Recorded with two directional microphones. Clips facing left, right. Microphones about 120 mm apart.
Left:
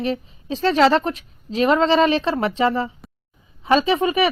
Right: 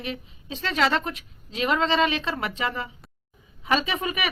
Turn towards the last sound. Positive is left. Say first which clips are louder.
# left 10 dB
turn(degrees=30)  # may be behind; listen again after turning